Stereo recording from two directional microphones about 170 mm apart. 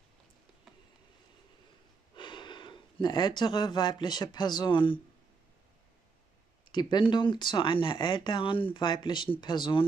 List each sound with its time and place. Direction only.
2.1 s speech: 30° left (ahead or behind)
6.7 s speech: 25° left (ahead or behind)